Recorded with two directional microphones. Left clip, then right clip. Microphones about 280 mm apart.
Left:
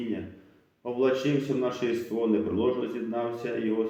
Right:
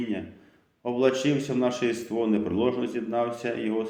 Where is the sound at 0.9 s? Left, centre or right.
Right.